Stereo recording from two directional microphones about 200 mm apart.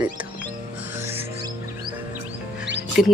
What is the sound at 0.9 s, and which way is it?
Music, 10° right (ahead or behind).